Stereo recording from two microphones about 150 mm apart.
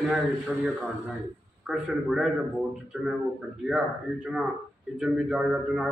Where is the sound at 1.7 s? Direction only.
Centre (ahead or behind).